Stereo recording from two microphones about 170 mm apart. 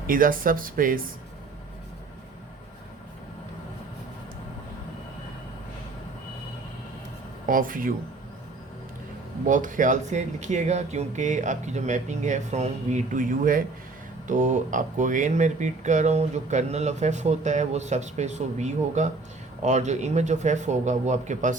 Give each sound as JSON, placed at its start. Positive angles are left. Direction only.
{"t": 0.1, "sound": "speech", "side_deg": -55}
{"t": 7.4, "sound": "speech", "side_deg": -55}
{"t": 9.5, "sound": "speech", "side_deg": -50}